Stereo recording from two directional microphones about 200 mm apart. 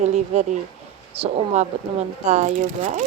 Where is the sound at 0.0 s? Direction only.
35° right (ahead or behind).